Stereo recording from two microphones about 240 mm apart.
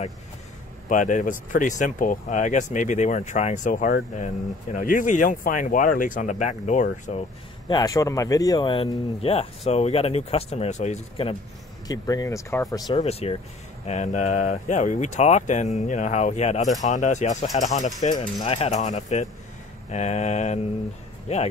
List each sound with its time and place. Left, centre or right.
0.8 s speech: left
11.9 s speech: centre